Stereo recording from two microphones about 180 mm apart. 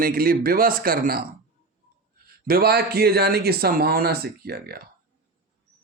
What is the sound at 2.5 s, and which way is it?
A man's voice, 60° right (ahead or behind).